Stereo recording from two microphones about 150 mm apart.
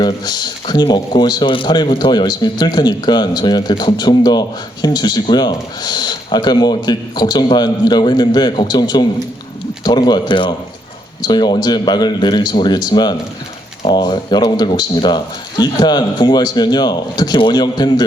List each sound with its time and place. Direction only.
0.0 s speech: 25° left (ahead or behind)